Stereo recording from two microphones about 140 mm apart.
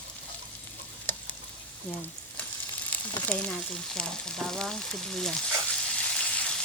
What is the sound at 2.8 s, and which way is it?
Frying, 10° left (ahead or behind).